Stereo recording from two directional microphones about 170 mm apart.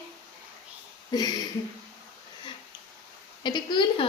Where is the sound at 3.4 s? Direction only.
25° left (ahead or behind).